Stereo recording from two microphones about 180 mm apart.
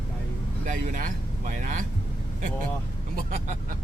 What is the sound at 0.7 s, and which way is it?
Speech, 45° right (ahead or behind).